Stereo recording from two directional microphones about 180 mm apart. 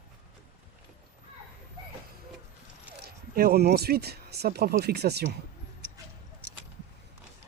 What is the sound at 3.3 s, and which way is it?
Speech, 55° right (ahead or behind).